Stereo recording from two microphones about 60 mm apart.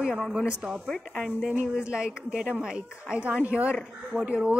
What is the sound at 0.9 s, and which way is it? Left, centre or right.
Speech, centre.